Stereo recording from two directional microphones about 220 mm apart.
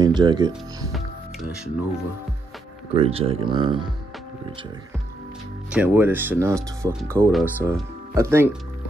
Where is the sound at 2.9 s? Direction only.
25° right (ahead or behind).